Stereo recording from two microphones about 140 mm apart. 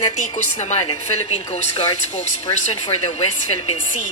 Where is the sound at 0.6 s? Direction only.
55° left (ahead or behind).